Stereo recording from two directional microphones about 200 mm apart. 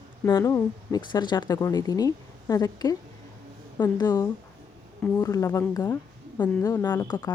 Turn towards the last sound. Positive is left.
turn(degrees=20)  # may be behind; listen again after turning